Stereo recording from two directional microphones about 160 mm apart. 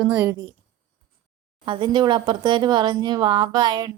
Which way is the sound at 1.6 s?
30° right (ahead or behind).